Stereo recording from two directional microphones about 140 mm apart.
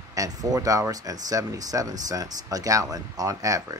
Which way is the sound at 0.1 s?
25° right (ahead or behind).